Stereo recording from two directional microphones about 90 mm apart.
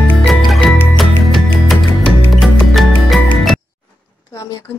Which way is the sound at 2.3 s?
Centre (ahead or behind).